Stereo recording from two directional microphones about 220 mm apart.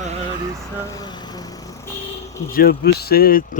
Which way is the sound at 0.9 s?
20° left (ahead or behind).